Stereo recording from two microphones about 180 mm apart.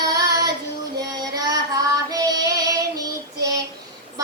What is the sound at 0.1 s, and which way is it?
Child singing, 20° right (ahead or behind).